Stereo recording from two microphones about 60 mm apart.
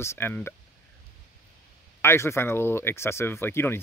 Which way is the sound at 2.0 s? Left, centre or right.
Left.